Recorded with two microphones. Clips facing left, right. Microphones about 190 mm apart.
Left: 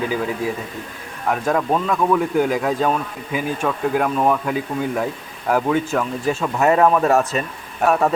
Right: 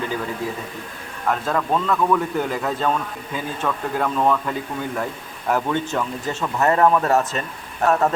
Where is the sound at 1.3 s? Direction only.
15° left (ahead or behind).